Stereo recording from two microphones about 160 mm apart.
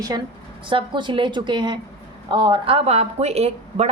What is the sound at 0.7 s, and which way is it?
A woman's voice, 30° right (ahead or behind).